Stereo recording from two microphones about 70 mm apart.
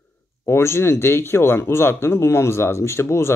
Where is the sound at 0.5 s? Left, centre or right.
Left.